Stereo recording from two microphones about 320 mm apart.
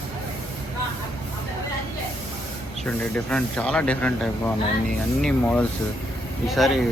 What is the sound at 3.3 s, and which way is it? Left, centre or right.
Speech, centre.